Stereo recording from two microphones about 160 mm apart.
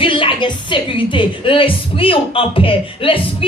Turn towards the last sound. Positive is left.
turn(degrees=35)  # may be behind; listen again after turning